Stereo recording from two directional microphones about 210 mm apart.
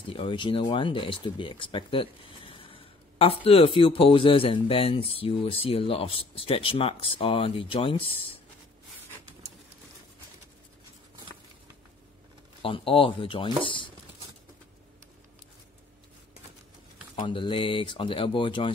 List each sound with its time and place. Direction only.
0.1 s speech: 25° left (ahead or behind)
12.6 s speech: 25° left (ahead or behind)
17.1 s speech: 25° left (ahead or behind)